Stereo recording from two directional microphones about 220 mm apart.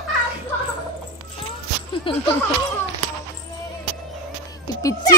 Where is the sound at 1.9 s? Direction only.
25° left (ahead or behind).